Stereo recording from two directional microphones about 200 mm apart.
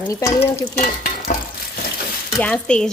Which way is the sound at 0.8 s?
45° left (ahead or behind).